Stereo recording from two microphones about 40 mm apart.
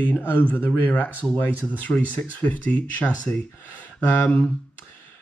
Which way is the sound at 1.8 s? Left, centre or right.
Left.